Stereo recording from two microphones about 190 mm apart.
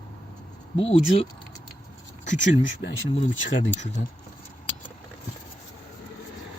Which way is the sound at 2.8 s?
70° left (ahead or behind).